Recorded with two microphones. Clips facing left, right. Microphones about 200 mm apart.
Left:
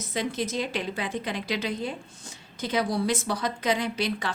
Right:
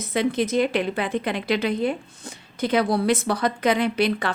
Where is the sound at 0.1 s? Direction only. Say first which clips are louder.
Right 7 dB; 60° right (ahead or behind).